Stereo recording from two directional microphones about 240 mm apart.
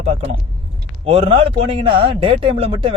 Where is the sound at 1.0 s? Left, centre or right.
Right.